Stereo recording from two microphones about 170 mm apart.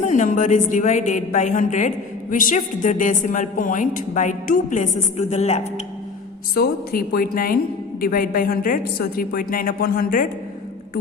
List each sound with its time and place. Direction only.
0.0 s a woman's voice: 50° left (ahead or behind)
6.5 s a woman's voice: 60° left (ahead or behind)